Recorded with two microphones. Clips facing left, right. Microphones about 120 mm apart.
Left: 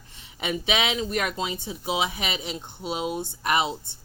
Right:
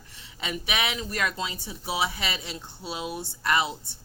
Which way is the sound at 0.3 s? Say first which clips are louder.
Left 4 dB; 20° left (ahead or behind).